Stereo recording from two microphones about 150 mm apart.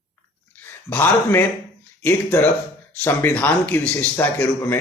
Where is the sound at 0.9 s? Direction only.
15° left (ahead or behind).